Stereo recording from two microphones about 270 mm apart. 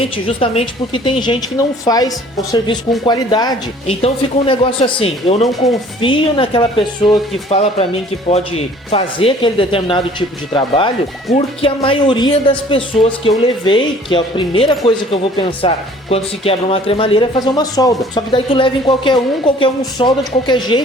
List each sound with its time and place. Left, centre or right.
0.0 s speech: left